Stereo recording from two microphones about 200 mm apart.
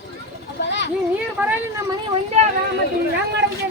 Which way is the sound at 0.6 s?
60° left (ahead or behind).